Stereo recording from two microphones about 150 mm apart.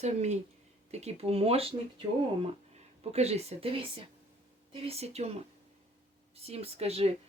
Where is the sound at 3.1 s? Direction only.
45° right (ahead or behind).